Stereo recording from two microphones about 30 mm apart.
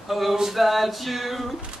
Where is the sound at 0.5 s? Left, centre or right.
Centre.